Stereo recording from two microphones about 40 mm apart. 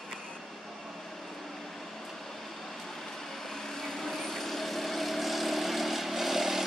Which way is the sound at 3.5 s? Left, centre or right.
Centre.